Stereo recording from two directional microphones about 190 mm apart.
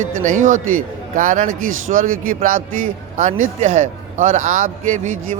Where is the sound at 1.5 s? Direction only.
90° right.